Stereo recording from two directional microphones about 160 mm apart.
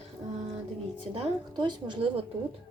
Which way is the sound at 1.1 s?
30° right (ahead or behind).